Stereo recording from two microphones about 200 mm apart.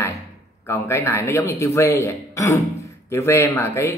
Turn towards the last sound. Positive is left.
turn(degrees=15)  # may be behind; listen again after turning